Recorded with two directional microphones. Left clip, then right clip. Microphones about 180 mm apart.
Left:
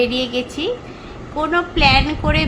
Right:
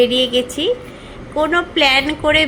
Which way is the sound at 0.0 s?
15° right (ahead or behind).